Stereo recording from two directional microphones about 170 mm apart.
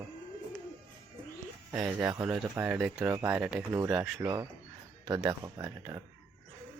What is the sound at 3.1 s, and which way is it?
Speech, 15° right (ahead or behind).